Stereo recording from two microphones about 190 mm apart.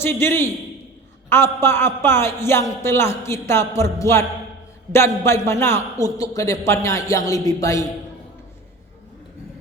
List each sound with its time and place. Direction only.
0.0 s a man's voice: 10° left (ahead or behind)